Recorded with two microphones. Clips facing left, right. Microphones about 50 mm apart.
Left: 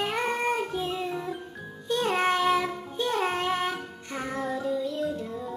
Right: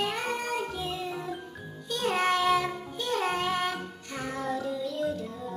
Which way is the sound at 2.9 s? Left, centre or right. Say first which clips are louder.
Left 4 dB; left.